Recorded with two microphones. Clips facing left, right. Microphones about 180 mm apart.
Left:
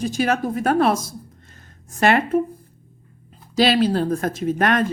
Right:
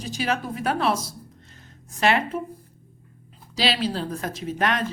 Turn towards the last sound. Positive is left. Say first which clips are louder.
# left 6 dB
turn(degrees=50)  # may be behind; listen again after turning